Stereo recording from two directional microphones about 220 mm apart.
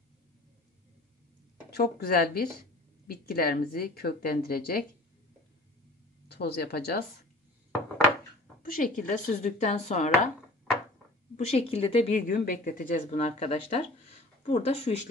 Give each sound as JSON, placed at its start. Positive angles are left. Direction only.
{"t": 1.7, "sound": "a woman's voice", "side_deg": 45}
{"t": 6.2, "sound": "a woman's voice", "side_deg": 45}
{"t": 8.7, "sound": "speech", "side_deg": 35}
{"t": 11.3, "sound": "speech", "side_deg": 30}